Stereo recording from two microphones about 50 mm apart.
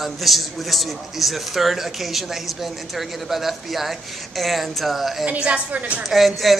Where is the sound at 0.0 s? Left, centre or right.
Centre.